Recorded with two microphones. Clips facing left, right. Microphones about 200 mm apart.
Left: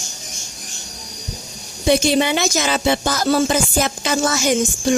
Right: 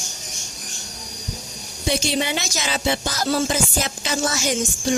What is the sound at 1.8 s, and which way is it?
Speech, 55° left (ahead or behind).